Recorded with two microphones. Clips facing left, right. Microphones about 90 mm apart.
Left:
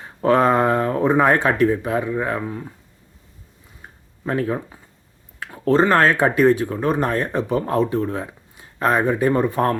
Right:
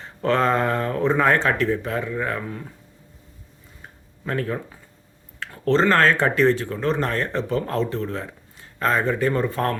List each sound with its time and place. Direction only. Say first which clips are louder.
0.0 s speech: left 4 dB; 15° left (ahead or behind)
4.3 s speech: left 4 dB; 20° left (ahead or behind)